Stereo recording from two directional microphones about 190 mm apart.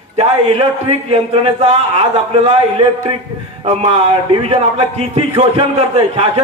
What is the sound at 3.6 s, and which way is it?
A man's voice, 35° right (ahead or behind).